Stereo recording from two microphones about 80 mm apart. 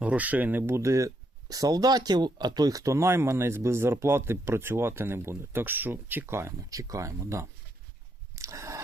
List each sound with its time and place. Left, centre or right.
0.0 s speech: centre
0.8 s speech: right
2.8 s speech: right
8.4 s a sound: right